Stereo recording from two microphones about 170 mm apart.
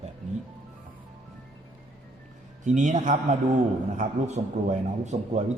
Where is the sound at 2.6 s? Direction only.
45° right (ahead or behind).